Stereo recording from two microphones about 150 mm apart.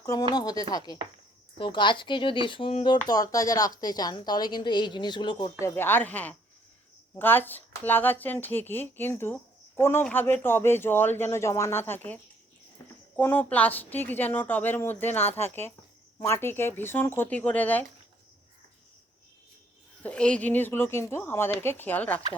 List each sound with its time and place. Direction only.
0.0 s a woman's voice: 20° left (ahead or behind)
5.5 s speech: 15° left (ahead or behind)
20.0 s speech: 10° left (ahead or behind)